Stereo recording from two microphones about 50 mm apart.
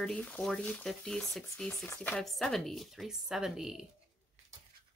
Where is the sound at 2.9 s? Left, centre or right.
Centre.